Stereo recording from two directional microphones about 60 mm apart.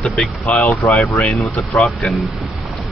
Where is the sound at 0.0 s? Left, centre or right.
Left.